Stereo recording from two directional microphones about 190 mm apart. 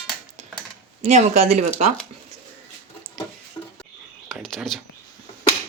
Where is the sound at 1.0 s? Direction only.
35° right (ahead or behind).